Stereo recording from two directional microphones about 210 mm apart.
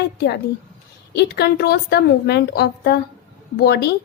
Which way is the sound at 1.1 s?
50° left (ahead or behind).